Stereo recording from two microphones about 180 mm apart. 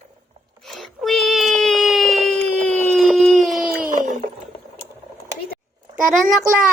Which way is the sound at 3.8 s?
50° right (ahead or behind).